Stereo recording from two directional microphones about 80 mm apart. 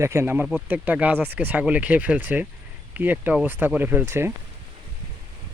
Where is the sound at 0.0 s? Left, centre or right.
Right.